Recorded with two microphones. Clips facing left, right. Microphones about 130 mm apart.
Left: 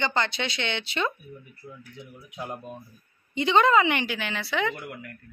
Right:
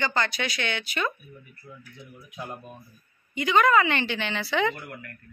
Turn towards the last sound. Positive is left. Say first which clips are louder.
# right 2 dB
turn(degrees=0)  # may be behind; listen again after turning